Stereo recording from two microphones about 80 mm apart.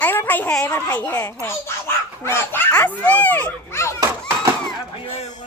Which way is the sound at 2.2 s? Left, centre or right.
Left.